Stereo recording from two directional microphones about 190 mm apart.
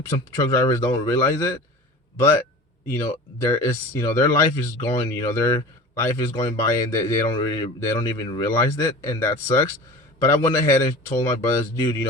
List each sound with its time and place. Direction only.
0.1 s speech: 20° left (ahead or behind)
2.2 s a sound: 15° left (ahead or behind)
3.4 s speech: 15° left (ahead or behind)